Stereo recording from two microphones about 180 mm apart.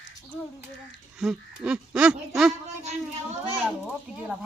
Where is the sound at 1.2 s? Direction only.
5° right (ahead or behind).